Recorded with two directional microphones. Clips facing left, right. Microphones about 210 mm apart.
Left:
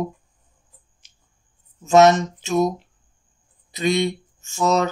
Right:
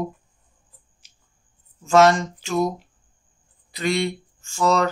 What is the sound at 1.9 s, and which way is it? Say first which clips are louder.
Speech: left 2 dB; 20° left (ahead or behind).